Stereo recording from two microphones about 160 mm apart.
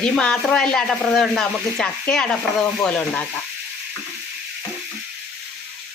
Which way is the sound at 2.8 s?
10° left (ahead or behind).